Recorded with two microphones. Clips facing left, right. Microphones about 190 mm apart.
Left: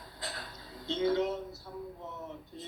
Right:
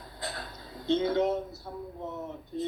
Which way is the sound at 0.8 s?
55° right (ahead or behind).